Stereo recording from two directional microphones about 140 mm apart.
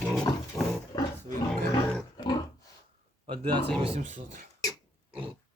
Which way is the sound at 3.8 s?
45° right (ahead or behind).